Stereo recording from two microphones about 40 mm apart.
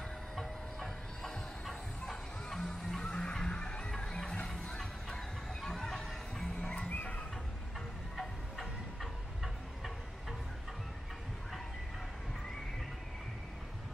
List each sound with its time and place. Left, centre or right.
0.4 s music: centre
3.0 s music: centre
6.6 s music: left
6.9 s horse: left
8.2 s train: centre